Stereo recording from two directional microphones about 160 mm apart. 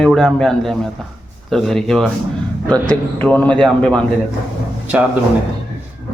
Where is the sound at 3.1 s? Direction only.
10° left (ahead or behind).